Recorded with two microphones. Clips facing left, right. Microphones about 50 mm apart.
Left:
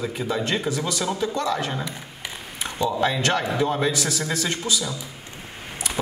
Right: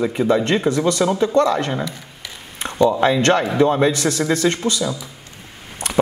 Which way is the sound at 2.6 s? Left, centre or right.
Right.